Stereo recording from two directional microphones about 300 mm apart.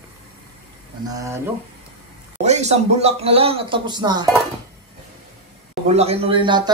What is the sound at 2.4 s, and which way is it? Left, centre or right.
Speech, right.